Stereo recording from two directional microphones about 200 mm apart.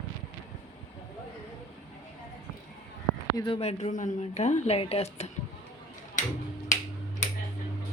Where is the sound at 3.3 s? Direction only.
25° left (ahead or behind).